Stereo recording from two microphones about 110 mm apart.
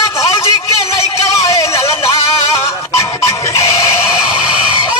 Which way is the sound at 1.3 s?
30° left (ahead or behind).